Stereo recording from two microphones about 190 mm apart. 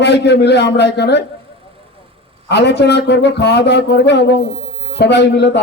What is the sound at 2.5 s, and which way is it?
A man's voice, 65° left (ahead or behind).